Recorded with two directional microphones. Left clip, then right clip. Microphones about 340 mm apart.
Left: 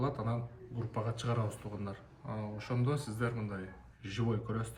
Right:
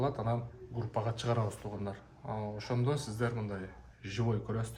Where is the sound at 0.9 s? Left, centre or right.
Centre.